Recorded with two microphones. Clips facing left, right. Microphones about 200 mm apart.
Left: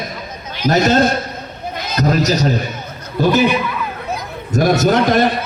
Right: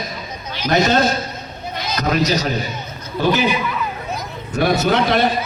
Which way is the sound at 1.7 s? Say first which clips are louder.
Left 3 dB; 45° left (ahead or behind).